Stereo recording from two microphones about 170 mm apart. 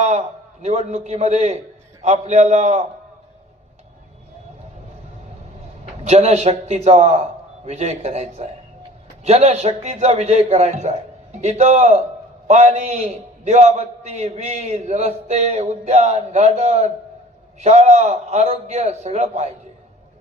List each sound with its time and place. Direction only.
0.0 s a man's voice: 40° right (ahead or behind)
6.1 s a man's voice: 40° right (ahead or behind)